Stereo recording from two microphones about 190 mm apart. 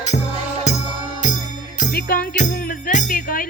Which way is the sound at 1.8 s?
50° left (ahead or behind).